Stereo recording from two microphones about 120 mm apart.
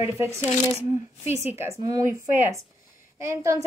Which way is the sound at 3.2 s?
25° right (ahead or behind).